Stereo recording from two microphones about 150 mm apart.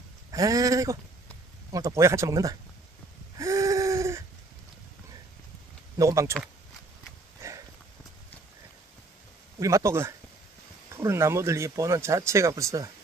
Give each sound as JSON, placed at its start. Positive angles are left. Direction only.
{"t": 0.3, "sound": "speech", "side_deg": -25}
{"t": 3.3, "sound": "a sound", "side_deg": -20}
{"t": 5.9, "sound": "speech", "side_deg": -20}
{"t": 9.6, "sound": "speech", "side_deg": -20}